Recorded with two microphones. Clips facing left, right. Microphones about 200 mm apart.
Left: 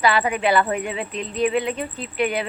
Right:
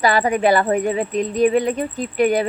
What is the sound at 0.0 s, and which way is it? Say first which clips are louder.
Speech: right 4 dB; 40° right (ahead or behind).